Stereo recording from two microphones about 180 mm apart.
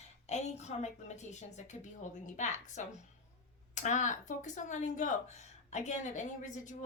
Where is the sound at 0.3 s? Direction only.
40° left (ahead or behind).